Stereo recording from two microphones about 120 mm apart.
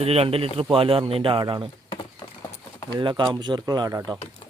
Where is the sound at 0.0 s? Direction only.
55° right (ahead or behind); by 1.7 s 40° right (ahead or behind).